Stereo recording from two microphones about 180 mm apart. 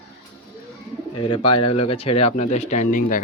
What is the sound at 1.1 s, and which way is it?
Speech, 25° left (ahead or behind).